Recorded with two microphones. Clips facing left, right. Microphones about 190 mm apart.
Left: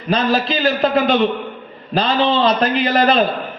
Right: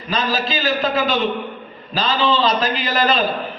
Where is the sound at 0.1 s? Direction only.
60° left (ahead or behind).